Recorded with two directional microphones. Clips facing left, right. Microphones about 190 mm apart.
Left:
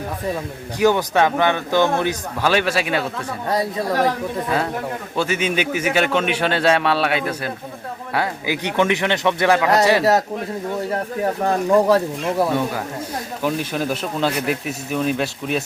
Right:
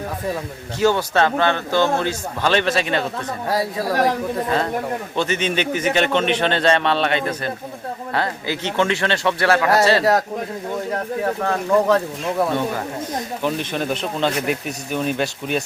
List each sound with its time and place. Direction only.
0.8 s a man's voice: 15° left (ahead or behind)
5.1 s a man's voice: 10° left (ahead or behind)
10.0 s speech: centre (ahead or behind)
11.4 s a man's voice: 15° left (ahead or behind)